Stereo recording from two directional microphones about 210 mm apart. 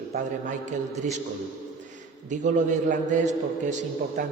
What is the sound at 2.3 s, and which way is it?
A man's voice, 35° right (ahead or behind).